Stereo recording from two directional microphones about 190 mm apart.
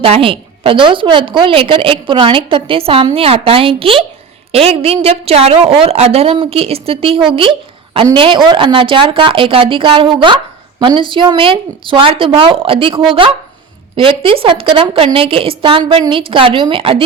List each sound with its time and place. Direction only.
0.0 s a woman's voice: 30° right (ahead or behind)